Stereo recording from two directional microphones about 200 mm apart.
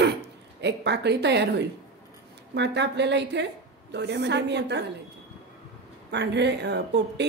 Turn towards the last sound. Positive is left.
turn(degrees=-60)  # may be behind; listen again after turning